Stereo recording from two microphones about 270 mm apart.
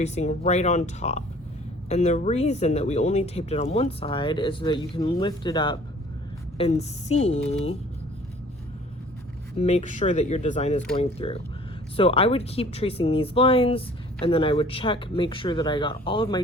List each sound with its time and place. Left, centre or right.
0.0 s speech: left
9.6 s speech: left